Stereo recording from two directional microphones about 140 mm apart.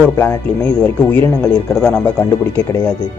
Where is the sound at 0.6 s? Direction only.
5° left (ahead or behind).